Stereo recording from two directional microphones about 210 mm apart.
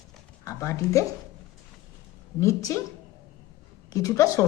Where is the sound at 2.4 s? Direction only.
15° left (ahead or behind).